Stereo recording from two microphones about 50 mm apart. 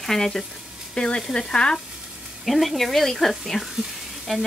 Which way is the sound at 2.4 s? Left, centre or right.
Centre.